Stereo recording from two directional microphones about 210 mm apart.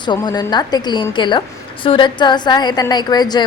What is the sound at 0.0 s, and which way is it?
A woman's voice, 20° left (ahead or behind).